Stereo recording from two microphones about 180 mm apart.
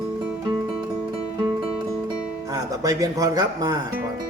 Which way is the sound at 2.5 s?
20° right (ahead or behind).